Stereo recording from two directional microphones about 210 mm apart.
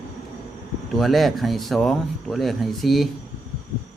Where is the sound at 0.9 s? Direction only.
Centre (ahead or behind).